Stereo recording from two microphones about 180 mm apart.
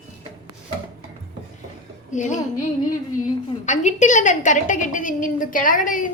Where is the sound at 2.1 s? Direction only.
45° left (ahead or behind).